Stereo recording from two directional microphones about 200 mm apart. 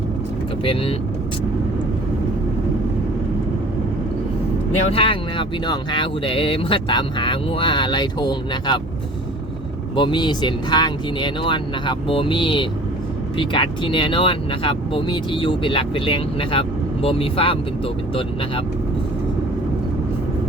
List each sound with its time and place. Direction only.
0.6 s speech: 25° left (ahead or behind)
4.9 s speech: 25° left (ahead or behind)
9.9 s speech: 25° left (ahead or behind)